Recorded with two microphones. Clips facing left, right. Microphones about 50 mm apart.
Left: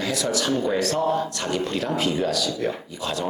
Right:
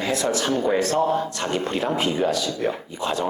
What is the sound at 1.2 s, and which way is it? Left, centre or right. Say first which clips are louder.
Speech: right 1 dB; right.